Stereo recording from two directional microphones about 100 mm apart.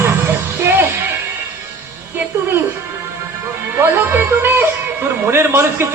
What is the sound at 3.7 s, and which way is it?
Speech, 25° right (ahead or behind).